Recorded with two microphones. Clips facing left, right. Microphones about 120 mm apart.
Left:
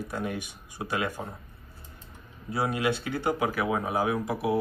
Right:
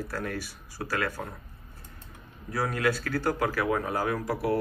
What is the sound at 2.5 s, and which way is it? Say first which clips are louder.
Speech: even; 25° left (ahead or behind).